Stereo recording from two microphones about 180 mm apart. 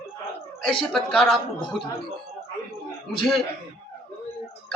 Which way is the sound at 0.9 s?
Centre (ahead or behind).